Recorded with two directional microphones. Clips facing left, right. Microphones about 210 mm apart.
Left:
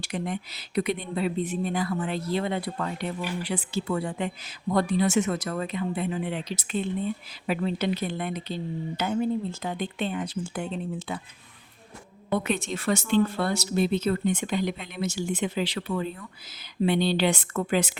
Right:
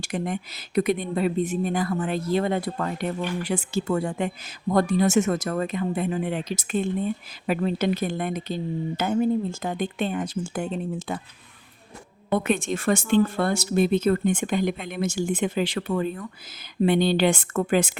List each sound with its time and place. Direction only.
0.0 s speech: 50° right (ahead or behind)
12.3 s speech: 50° right (ahead or behind)